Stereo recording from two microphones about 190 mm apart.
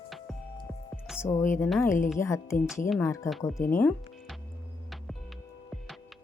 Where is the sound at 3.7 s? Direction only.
5° left (ahead or behind).